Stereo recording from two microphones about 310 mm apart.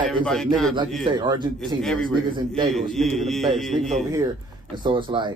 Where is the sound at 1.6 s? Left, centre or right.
Centre.